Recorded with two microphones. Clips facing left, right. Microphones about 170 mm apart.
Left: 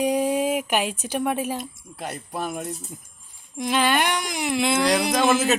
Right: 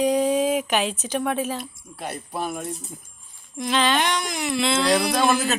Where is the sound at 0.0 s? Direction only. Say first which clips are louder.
Right 2 dB; 10° left (ahead or behind).